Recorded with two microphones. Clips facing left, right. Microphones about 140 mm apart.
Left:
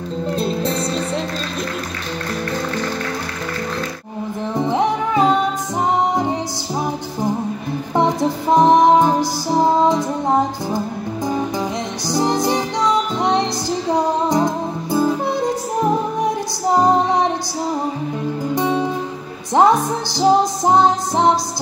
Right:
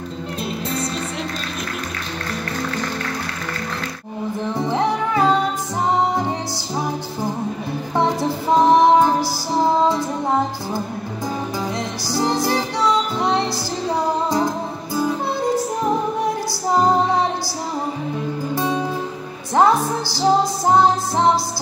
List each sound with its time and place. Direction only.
0.4 s music: 30° left (ahead or behind)
4.6 s music: 15° left (ahead or behind)
7.9 s music: 15° left (ahead or behind)
12.1 s music: 15° left (ahead or behind)
18.5 s music: 15° left (ahead or behind)